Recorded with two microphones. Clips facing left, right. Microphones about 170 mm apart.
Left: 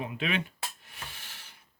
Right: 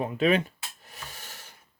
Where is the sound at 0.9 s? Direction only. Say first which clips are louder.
Right 3 dB; 40° right (ahead or behind).